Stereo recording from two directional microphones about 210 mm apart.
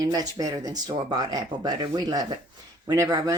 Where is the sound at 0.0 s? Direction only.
20° right (ahead or behind).